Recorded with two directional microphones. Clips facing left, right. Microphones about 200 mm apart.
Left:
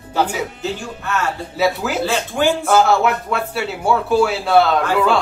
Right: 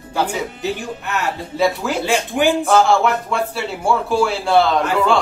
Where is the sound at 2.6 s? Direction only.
5° left (ahead or behind).